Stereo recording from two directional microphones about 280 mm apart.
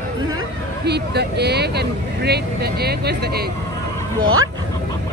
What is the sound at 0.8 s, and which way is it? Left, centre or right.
Speech, right.